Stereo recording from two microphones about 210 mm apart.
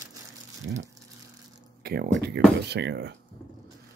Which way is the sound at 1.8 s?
50° right (ahead or behind).